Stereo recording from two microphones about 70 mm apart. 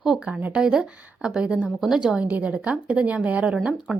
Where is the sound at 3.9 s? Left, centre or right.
Centre.